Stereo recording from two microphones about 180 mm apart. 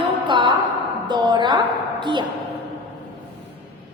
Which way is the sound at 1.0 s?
25° right (ahead or behind).